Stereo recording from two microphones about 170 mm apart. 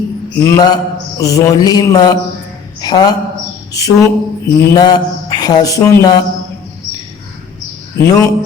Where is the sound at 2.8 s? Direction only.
25° left (ahead or behind).